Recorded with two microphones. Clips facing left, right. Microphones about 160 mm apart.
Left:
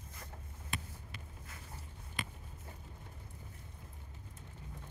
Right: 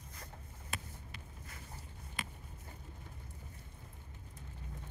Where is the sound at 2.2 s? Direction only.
Centre (ahead or behind).